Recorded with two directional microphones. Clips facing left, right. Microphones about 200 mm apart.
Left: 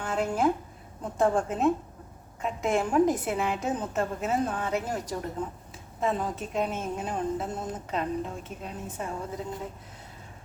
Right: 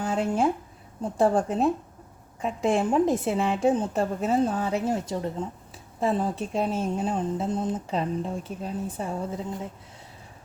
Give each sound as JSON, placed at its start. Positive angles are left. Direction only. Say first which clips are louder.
{"t": 0.1, "sound": "a woman's voice", "louder": "even", "side_deg": -30}